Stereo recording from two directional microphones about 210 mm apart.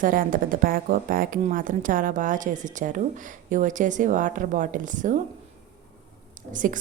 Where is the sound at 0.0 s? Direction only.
40° right (ahead or behind).